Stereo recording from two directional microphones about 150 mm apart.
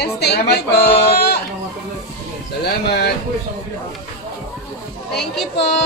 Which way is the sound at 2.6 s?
90° left.